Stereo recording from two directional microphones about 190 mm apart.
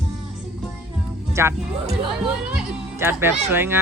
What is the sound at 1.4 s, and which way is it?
Speech, 15° right (ahead or behind).